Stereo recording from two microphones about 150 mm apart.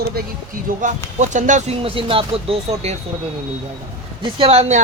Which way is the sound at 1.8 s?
35° right (ahead or behind).